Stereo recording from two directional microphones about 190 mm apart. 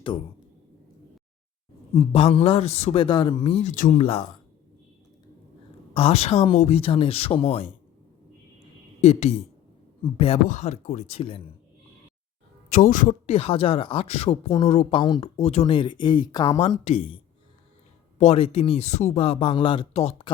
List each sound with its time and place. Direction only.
2.1 s speech: 30° left (ahead or behind)
4.0 s speech: 30° left (ahead or behind)
5.9 s speech: 30° left (ahead or behind)
9.0 s speech: 35° left (ahead or behind)
12.7 s speech: 45° left (ahead or behind)
13.2 s speech: 30° left (ahead or behind)
18.2 s speech: 30° left (ahead or behind)